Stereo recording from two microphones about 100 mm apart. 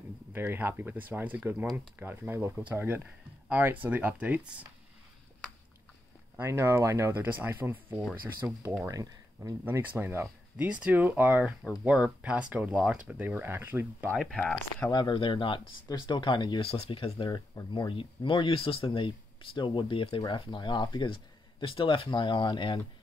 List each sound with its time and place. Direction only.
0.3 s speech: 20° right (ahead or behind)
6.3 s speech: 25° right (ahead or behind)
9.7 s speech: 20° right (ahead or behind)
14.1 s speech: 5° left (ahead or behind)
14.9 s speech: 50° left (ahead or behind)
16.6 s speech: 80° left
17.3 s speech: 45° left (ahead or behind)